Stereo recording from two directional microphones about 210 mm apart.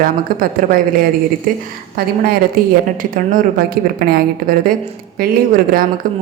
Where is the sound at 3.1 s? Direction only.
45° right (ahead or behind).